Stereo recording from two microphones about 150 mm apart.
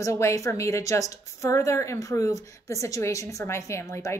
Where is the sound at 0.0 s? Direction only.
20° left (ahead or behind).